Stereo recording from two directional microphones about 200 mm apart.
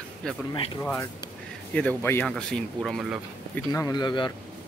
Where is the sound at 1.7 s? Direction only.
5° left (ahead or behind).